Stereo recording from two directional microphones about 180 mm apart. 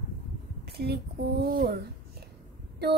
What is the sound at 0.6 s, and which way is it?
Speech, 60° right (ahead or behind).